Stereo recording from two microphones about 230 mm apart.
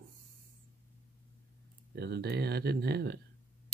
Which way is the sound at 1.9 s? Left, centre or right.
Right.